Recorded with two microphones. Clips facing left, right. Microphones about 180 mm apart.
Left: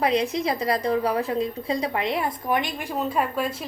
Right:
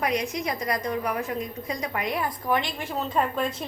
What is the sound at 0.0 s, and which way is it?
A woman's voice, 30° left (ahead or behind).